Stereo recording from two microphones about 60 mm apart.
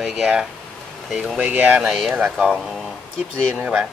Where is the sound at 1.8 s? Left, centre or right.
Centre.